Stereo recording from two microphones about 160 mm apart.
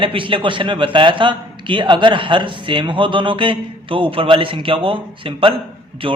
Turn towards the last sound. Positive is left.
turn(degrees=-35)  # may be behind; listen again after turning